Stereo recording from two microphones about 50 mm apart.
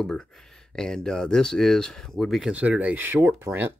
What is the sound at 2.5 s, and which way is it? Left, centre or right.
Speech, right.